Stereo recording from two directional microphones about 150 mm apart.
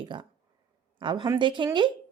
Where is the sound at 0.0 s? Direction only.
35° right (ahead or behind).